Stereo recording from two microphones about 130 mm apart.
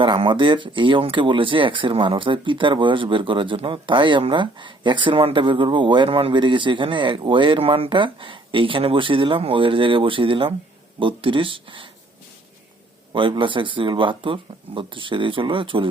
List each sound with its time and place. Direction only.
0.0 s speech: 40° right (ahead or behind)
13.1 s speech: 40° right (ahead or behind)